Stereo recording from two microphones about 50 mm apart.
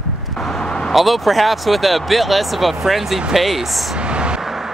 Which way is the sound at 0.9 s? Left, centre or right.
Centre.